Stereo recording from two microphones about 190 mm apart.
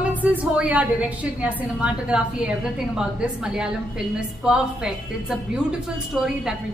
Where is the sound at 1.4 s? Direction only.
5° right (ahead or behind).